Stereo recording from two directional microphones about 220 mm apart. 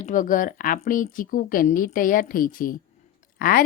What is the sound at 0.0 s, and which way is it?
A woman's voice, 35° left (ahead or behind).